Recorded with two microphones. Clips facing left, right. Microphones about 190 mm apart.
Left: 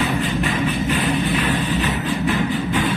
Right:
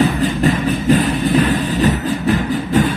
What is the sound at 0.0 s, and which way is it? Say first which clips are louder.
Music: right 6 dB; 40° right (ahead or behind).